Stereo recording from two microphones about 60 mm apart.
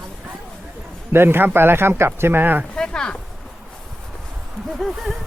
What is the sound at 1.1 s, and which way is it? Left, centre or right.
Speech, right.